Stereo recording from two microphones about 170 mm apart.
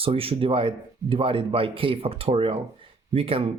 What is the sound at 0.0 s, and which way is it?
Speech, 35° right (ahead or behind).